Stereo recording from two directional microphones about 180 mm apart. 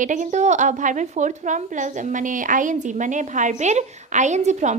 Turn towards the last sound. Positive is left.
turn(degrees=-40)  # may be behind; listen again after turning